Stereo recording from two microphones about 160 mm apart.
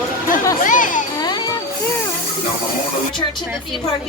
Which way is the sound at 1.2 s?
25° left (ahead or behind).